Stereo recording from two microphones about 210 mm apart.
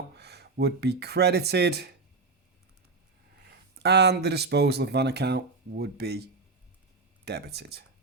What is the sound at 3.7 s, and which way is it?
Speech, 50° right (ahead or behind).